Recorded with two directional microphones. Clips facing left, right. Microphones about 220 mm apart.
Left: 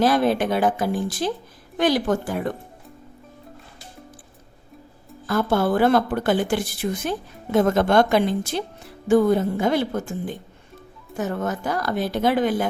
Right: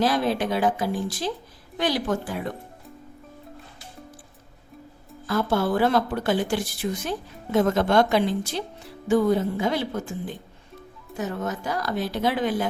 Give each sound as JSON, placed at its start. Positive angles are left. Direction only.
{"t": 0.0, "sound": "a woman's voice", "side_deg": 50}
{"t": 5.2, "sound": "a woman's voice", "side_deg": 50}
{"t": 11.2, "sound": "a woman's voice", "side_deg": 50}